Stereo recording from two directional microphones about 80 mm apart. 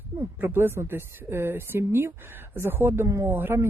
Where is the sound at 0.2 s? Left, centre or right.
Right.